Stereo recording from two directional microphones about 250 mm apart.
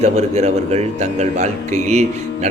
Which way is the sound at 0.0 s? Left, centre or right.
Right.